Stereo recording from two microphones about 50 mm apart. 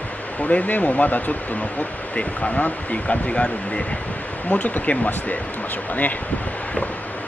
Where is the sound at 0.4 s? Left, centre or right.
Left.